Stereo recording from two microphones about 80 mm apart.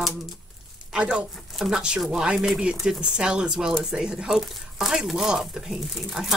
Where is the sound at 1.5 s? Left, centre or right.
Centre.